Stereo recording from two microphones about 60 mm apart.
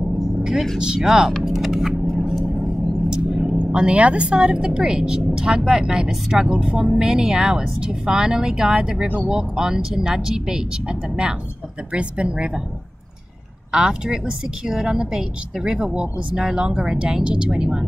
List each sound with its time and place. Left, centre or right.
0.4 s vehicle: centre
0.7 s a woman's voice: centre
1.0 s vehicle: centre
3.1 s a woman's voice: centre
13.7 s a woman's voice: centre